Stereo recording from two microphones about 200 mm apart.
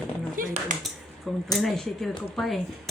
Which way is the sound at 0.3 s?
40° right (ahead or behind).